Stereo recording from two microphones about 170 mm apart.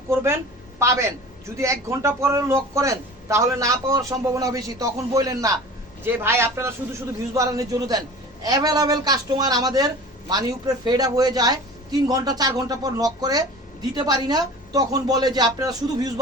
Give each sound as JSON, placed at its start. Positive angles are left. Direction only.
{"t": 0.1, "sound": "a man's voice", "side_deg": -15}